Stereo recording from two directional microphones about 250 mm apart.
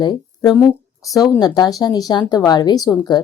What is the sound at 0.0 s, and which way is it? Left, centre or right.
Speech, centre.